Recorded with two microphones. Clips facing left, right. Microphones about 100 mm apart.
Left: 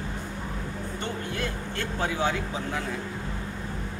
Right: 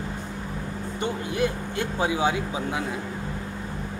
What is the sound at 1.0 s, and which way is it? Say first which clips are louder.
Speech: right 7 dB; 15° right (ahead or behind).